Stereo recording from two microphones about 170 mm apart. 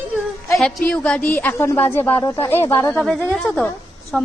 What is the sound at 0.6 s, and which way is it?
A woman's voice, 5° left (ahead or behind).